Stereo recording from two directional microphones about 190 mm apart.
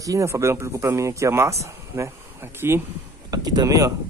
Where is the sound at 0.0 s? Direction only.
15° right (ahead or behind).